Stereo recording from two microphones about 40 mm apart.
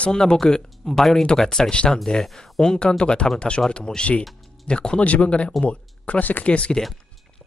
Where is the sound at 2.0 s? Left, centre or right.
Centre.